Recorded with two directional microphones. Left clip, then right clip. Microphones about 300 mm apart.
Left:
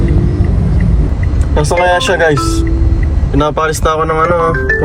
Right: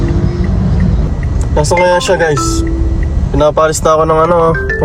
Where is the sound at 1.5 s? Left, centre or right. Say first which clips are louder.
Right 1 dB; centre.